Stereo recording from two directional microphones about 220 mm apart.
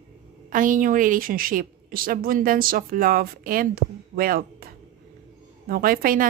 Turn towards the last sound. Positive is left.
turn(degrees=-40)  # may be behind; listen again after turning